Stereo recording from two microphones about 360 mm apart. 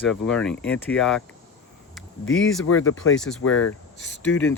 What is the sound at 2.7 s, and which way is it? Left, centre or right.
Speech, left.